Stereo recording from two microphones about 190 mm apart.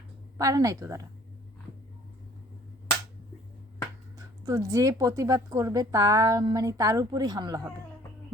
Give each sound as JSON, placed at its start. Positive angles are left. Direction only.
{"t": 0.3, "sound": "speech", "side_deg": -15}
{"t": 4.2, "sound": "speech", "side_deg": -20}